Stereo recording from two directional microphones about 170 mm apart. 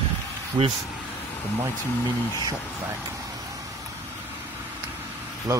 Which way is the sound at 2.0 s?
15° left (ahead or behind).